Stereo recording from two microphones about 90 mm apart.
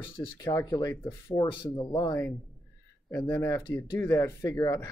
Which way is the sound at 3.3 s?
25° left (ahead or behind).